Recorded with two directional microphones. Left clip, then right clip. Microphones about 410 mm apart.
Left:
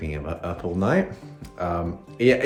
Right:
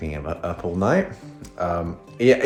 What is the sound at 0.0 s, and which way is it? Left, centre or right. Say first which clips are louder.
Speech: right 3 dB; centre.